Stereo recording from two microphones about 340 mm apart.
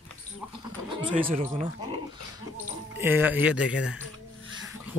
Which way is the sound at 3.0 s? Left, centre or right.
Centre.